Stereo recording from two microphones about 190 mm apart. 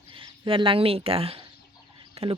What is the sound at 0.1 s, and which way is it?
Speech, 25° right (ahead or behind).